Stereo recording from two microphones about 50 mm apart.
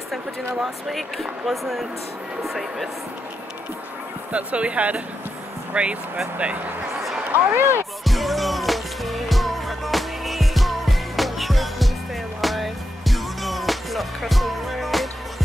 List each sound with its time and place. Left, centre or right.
0.1 s speech: centre
4.3 s speech: right
7.4 s speech: right
8.0 s music: centre